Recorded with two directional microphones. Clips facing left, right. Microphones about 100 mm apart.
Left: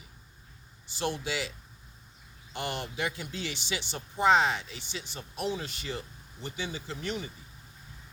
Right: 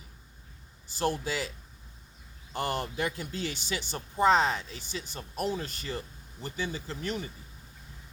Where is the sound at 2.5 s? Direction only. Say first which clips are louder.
Right 3 dB; 40° right (ahead or behind).